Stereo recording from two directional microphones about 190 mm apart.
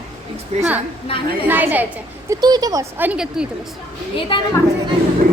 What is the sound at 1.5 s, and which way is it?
Speech, 10° right (ahead or behind).